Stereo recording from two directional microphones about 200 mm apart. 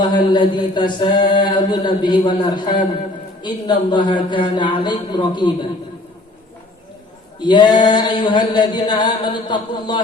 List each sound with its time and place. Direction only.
0.0 s chant: 25° left (ahead or behind)
7.3 s chant: 20° left (ahead or behind)